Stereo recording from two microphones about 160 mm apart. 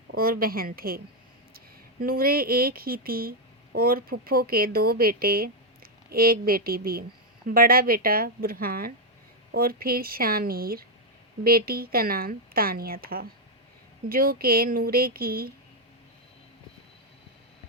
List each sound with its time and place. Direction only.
0.2 s speech: 65° right (ahead or behind)